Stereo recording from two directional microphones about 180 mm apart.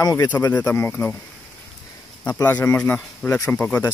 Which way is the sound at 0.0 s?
20° left (ahead or behind).